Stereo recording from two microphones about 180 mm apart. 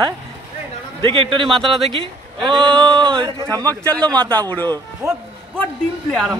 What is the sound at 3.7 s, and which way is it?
Speech, 5° left (ahead or behind).